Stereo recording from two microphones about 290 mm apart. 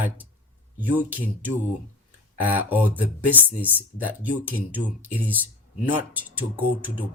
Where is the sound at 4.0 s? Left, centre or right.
Centre.